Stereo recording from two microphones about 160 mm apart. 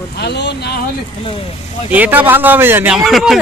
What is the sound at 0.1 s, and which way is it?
Speech, 90° left.